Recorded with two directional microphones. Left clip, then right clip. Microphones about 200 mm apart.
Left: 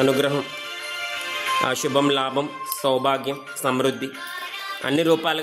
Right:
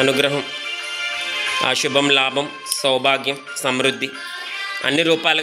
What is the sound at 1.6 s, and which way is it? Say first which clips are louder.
Speech: right 3 dB; 10° left (ahead or behind).